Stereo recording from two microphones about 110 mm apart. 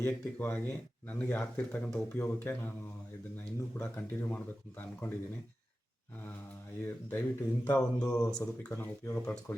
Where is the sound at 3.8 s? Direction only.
15° left (ahead or behind).